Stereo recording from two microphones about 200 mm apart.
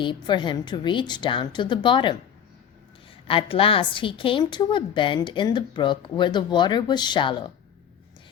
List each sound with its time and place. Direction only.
0.0 s a woman's voice: 25° left (ahead or behind)
3.2 s a woman's voice: 25° left (ahead or behind)